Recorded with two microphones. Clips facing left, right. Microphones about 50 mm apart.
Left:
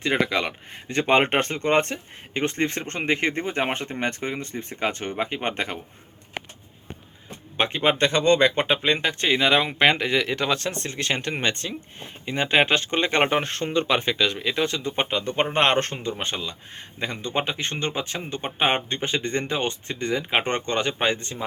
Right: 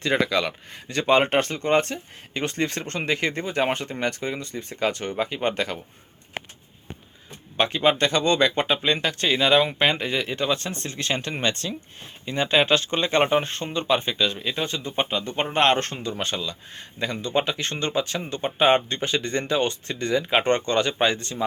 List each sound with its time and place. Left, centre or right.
0.0 s speech: centre
7.5 s speech: left
9.7 s speech: left